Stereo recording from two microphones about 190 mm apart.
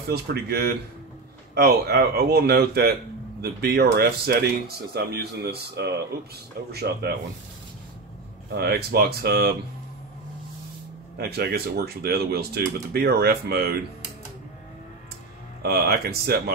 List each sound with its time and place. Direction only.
0.1 s speech: 55° right (ahead or behind)
8.5 s speech: 55° right (ahead or behind)
11.1 s speech: 55° right (ahead or behind)
15.6 s speech: 55° right (ahead or behind)